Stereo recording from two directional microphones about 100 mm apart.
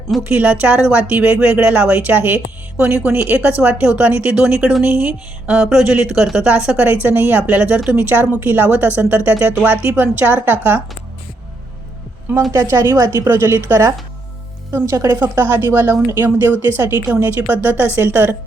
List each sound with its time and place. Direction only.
0.3 s speech: 15° right (ahead or behind)
12.5 s a woman's voice: 30° right (ahead or behind)